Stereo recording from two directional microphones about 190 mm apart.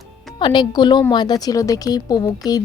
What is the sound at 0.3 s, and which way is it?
A woman's voice, 25° left (ahead or behind).